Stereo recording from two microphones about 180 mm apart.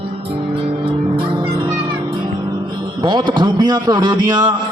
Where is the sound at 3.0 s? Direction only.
25° right (ahead or behind).